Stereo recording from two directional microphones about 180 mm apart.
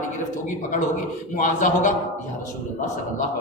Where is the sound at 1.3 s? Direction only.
45° left (ahead or behind).